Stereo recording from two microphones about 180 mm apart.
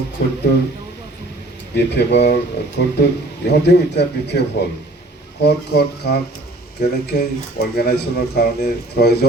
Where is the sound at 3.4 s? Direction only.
70° left (ahead or behind).